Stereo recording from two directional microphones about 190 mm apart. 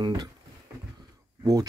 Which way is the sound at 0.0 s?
20° right (ahead or behind).